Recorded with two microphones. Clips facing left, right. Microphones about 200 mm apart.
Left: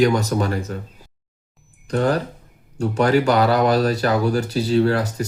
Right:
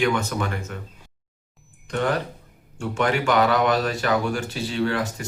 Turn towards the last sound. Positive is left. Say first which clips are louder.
# left 6 dB
turn(degrees=40)  # may be behind; listen again after turning